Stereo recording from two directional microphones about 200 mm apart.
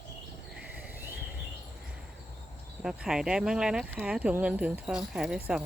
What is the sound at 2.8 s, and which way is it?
Speech, 5° right (ahead or behind).